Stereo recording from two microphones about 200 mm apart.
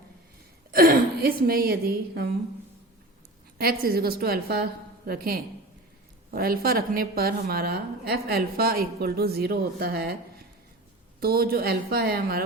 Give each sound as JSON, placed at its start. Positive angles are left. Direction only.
{"t": 0.7, "sound": "a woman's voice", "side_deg": -45}
{"t": 3.6, "sound": "a woman's voice", "side_deg": -50}
{"t": 11.2, "sound": "a woman's voice", "side_deg": -50}